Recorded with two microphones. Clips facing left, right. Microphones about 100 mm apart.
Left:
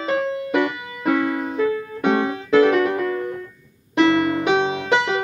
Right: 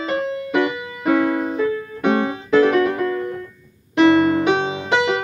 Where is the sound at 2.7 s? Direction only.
25° left (ahead or behind).